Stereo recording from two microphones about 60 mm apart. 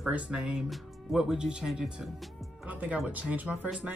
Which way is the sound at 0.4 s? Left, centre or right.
Centre.